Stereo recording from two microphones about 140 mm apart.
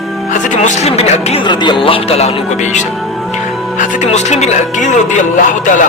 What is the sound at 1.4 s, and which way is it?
Music, 35° left (ahead or behind).